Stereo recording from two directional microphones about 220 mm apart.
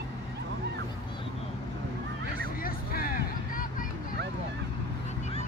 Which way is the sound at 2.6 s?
40° left (ahead or behind).